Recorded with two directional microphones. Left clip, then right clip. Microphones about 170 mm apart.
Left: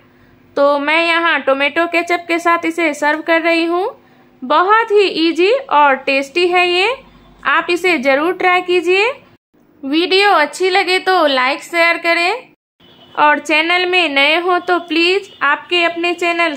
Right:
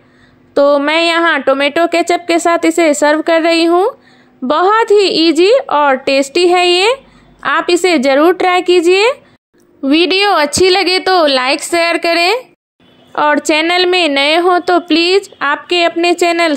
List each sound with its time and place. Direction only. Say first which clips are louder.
0.8 s a woman's voice: right 2 dB; 25° right (ahead or behind)
9.8 s a woman's voice: right 2 dB; 35° right (ahead or behind)
13.1 s a woman's voice: right 1 dB; 25° right (ahead or behind)